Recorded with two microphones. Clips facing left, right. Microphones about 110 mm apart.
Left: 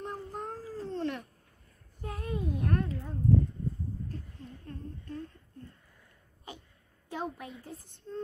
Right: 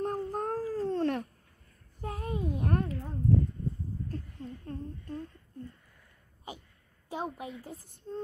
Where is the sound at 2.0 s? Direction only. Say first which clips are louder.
Right 1 dB; 30° right (ahead or behind).